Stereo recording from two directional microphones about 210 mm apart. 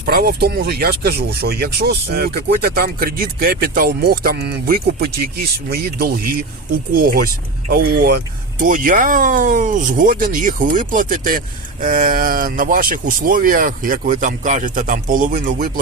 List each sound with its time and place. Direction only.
0.0 s speech: 45° right (ahead or behind)